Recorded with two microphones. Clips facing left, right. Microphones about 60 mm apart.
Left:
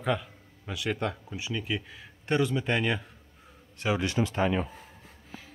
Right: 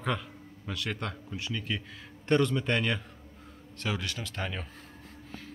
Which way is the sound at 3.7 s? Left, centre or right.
Centre.